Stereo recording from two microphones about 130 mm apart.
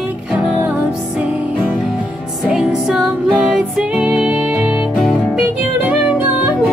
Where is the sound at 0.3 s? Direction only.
10° right (ahead or behind).